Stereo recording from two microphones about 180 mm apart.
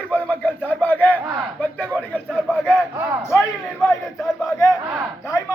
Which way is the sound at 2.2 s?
5° right (ahead or behind).